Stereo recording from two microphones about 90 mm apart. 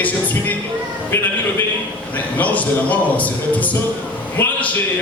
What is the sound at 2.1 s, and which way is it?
Speech, 15° left (ahead or behind).